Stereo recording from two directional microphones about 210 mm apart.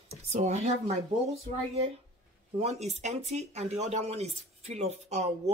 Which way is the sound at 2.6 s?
30° right (ahead or behind).